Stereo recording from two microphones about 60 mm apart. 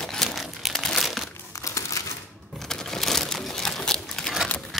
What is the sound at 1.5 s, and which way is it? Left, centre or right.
Crumpling, left.